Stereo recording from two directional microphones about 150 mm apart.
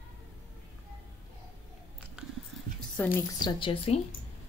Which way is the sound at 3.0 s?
10° left (ahead or behind).